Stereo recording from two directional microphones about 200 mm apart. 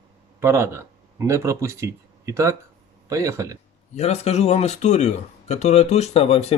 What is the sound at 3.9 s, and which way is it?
Speech, 30° left (ahead or behind).